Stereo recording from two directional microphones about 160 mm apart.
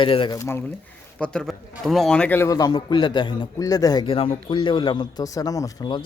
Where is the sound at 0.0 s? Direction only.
30° left (ahead or behind).